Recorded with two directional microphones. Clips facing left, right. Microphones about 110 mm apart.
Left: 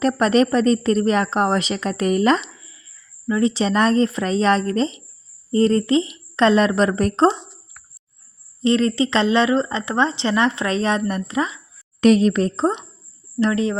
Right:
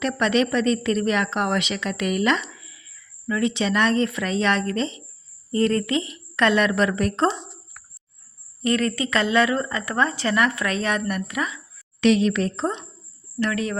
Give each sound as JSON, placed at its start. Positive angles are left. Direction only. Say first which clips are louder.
{"t": 0.0, "sound": "a woman's voice", "louder": "left 5 dB", "side_deg": 35}
{"t": 8.6, "sound": "speech", "louder": "left 5 dB", "side_deg": 25}
{"t": 11.9, "sound": "a woman's voice", "louder": "left 4 dB", "side_deg": 40}